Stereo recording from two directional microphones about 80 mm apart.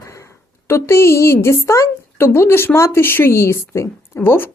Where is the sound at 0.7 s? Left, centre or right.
Left.